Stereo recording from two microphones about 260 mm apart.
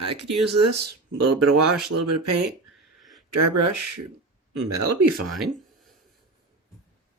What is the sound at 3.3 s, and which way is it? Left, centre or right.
Speech, right.